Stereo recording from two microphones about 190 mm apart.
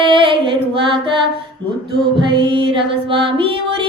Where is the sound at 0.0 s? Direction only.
25° right (ahead or behind).